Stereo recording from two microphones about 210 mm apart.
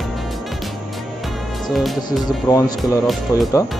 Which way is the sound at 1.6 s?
Centre (ahead or behind).